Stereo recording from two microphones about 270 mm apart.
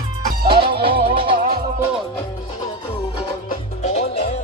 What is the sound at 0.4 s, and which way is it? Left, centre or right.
Music, centre.